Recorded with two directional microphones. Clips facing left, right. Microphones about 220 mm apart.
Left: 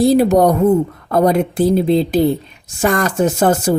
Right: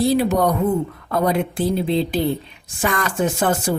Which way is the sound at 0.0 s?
40° left (ahead or behind).